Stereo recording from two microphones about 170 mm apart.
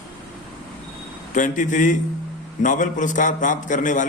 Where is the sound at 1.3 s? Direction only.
50° left (ahead or behind).